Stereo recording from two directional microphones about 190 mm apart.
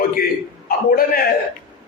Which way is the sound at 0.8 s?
50° left (ahead or behind).